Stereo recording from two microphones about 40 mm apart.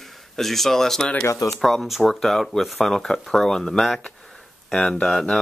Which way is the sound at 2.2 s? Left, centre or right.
Centre.